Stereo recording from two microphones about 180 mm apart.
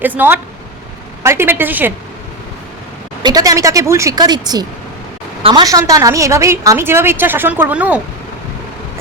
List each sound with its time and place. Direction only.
0.0 s a woman's voice: 10° right (ahead or behind)
3.2 s a woman's voice: 20° right (ahead or behind)
5.6 s a woman's voice: 20° right (ahead or behind)